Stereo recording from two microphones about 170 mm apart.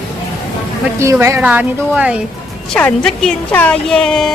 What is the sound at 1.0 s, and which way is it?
Speech, 15° right (ahead or behind).